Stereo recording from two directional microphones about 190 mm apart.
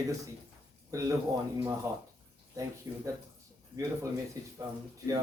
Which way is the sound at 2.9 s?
15° right (ahead or behind).